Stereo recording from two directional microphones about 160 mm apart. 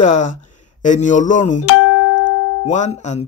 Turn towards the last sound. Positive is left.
turn(degrees=45)  # may be behind; listen again after turning